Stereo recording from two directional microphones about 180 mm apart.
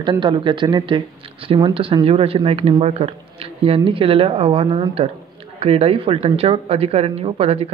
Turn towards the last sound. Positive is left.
turn(degrees=-35)  # may be behind; listen again after turning